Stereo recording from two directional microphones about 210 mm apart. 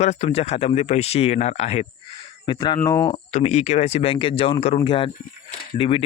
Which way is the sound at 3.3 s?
30° left (ahead or behind).